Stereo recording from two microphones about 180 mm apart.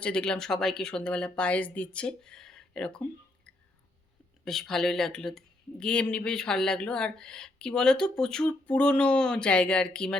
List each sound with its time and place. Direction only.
0.0 s speech: 5° left (ahead or behind)